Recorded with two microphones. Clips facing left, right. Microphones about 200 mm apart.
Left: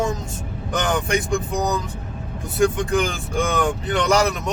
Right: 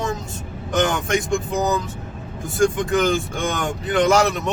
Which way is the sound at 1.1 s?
Centre (ahead or behind).